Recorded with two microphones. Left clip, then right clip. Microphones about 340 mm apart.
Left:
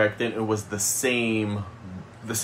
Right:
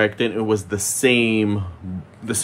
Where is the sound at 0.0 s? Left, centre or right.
Right.